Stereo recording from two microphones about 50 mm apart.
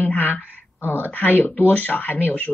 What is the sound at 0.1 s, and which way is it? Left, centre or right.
Speech, left.